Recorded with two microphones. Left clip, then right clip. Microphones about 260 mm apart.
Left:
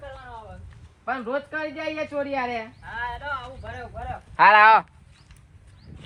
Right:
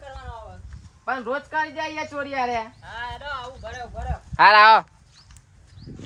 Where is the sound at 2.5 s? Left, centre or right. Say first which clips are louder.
Right 3 dB; right.